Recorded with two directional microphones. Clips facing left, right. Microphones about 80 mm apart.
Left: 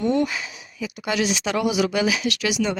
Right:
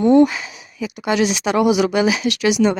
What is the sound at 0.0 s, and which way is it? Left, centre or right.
A woman's voice, right.